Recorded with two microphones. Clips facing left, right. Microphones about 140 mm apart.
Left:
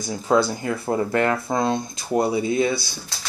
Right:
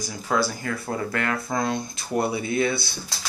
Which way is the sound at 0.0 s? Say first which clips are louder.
Left 5 dB; 25° left (ahead or behind).